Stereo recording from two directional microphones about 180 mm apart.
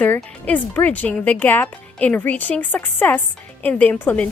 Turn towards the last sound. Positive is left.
turn(degrees=10)  # may be behind; listen again after turning